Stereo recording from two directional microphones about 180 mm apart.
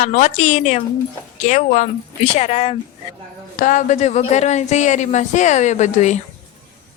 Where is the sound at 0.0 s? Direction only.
45° left (ahead or behind).